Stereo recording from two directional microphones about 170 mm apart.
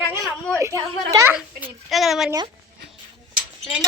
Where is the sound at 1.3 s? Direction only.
5° right (ahead or behind).